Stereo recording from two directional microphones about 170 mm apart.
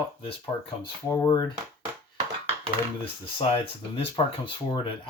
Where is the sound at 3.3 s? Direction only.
30° left (ahead or behind).